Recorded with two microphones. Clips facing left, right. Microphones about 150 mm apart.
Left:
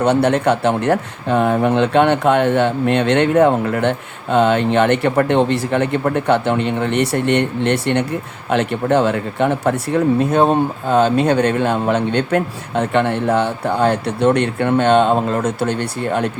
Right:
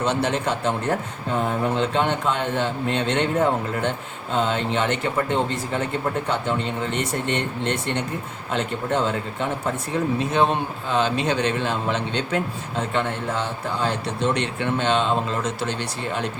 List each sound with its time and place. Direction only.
0.0 s speech: 60° left (ahead or behind)